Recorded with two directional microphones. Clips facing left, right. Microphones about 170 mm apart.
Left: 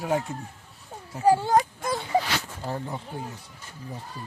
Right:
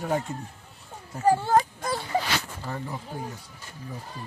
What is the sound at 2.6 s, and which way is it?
Speech, 30° left (ahead or behind).